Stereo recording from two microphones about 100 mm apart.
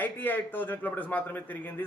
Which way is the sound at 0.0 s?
20° left (ahead or behind).